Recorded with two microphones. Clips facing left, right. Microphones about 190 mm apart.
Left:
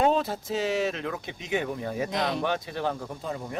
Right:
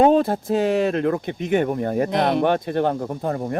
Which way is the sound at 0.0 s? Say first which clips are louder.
Right 8 dB; 55° right (ahead or behind).